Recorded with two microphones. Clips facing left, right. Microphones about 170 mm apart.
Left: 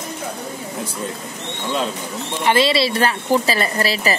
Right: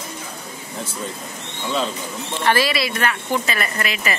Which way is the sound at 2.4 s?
25° left (ahead or behind).